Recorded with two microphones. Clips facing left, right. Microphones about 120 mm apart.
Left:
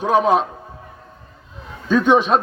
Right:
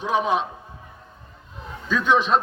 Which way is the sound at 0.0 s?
45° left (ahead or behind).